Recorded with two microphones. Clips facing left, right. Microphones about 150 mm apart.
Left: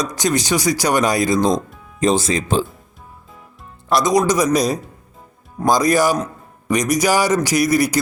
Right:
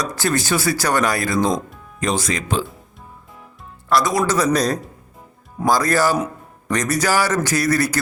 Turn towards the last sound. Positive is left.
turn(degrees=15)  # may be behind; listen again after turning